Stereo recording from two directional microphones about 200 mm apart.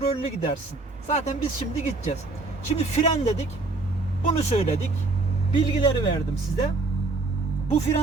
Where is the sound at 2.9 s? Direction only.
35° left (ahead or behind).